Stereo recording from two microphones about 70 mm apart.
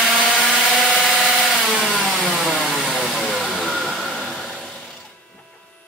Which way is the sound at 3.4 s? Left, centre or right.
Centre.